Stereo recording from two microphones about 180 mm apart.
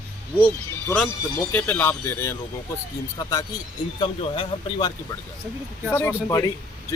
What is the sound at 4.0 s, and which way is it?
Speech, 25° left (ahead or behind).